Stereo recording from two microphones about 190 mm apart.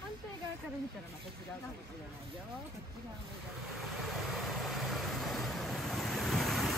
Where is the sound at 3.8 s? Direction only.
Centre (ahead or behind).